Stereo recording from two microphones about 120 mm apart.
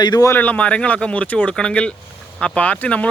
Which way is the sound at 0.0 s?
35° left (ahead or behind).